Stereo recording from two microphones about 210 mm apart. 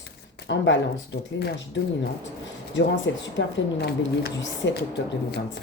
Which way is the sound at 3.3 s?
50° left (ahead or behind).